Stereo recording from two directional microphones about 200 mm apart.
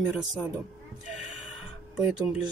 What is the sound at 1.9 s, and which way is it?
Speech, 5° right (ahead or behind).